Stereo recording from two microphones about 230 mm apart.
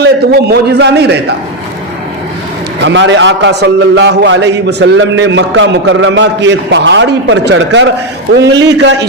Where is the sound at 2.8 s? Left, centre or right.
Right.